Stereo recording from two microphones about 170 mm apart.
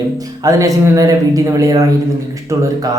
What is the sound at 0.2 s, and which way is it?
A man's voice, 20° right (ahead or behind).